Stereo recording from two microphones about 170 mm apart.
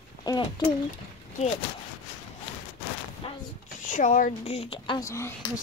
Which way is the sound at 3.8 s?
50° left (ahead or behind).